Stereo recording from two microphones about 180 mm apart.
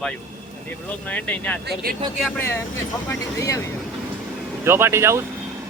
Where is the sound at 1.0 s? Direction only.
10° left (ahead or behind).